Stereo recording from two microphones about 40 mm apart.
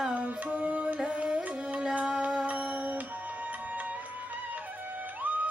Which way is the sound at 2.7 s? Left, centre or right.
Right.